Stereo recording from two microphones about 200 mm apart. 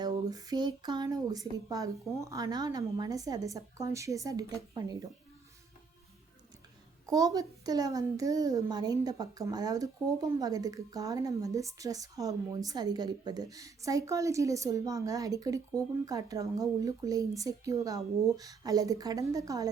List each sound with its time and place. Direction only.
0.0 s a child's voice: 20° right (ahead or behind)
7.1 s a child's voice: 15° right (ahead or behind)